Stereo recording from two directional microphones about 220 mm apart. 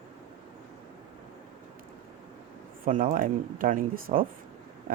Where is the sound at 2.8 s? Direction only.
35° right (ahead or behind).